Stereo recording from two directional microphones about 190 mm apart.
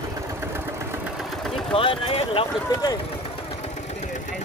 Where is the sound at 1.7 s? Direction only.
30° left (ahead or behind).